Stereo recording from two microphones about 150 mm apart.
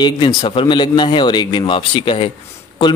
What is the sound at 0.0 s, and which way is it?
Speech, 30° left (ahead or behind).